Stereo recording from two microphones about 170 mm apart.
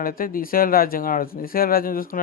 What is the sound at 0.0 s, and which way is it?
Speech, 55° left (ahead or behind).